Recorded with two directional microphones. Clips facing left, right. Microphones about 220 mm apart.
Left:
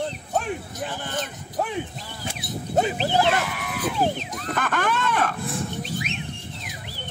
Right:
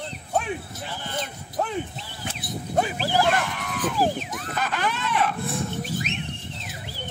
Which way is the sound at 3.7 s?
10° left (ahead or behind).